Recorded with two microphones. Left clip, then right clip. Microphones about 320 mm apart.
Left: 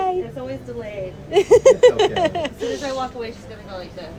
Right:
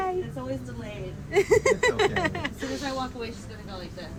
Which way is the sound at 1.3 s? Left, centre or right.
Centre.